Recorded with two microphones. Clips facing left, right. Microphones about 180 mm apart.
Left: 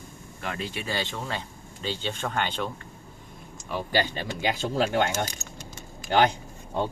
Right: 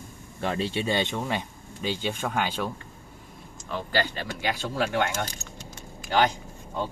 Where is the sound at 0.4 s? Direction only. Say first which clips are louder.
Right 6 dB; 30° right (ahead or behind); by 2.7 s 10° right (ahead or behind).